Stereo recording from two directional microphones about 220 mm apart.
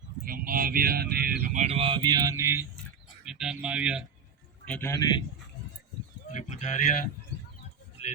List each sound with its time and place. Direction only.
0.3 s speech: 40° right (ahead or behind); by 4.0 s 5° right (ahead or behind)
4.6 s a man's voice: 10° left (ahead or behind)
6.3 s speech: 30° left (ahead or behind)